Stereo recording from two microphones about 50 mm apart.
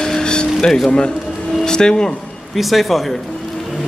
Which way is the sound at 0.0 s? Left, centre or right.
Centre.